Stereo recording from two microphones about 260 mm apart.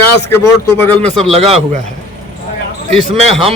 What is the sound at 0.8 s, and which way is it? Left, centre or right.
Speech, centre.